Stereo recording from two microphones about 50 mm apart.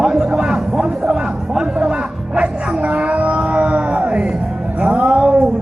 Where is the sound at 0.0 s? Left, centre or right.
Centre.